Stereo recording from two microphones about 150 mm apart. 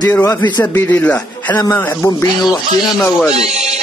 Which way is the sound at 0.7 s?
10° left (ahead or behind).